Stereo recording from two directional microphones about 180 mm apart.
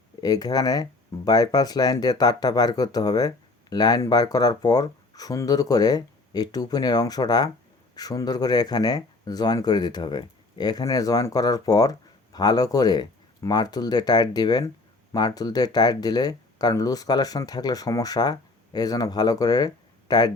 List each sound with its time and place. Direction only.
0.2 s speech: 20° left (ahead or behind)